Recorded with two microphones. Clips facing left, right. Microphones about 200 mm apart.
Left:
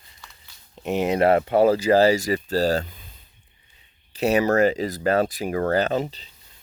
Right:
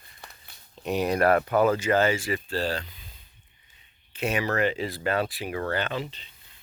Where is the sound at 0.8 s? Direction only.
20° left (ahead or behind); by 3.0 s 45° left (ahead or behind).